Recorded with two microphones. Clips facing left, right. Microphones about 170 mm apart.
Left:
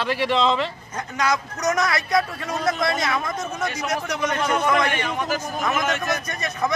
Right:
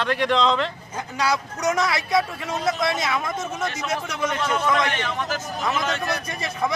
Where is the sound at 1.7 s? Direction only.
25° right (ahead or behind).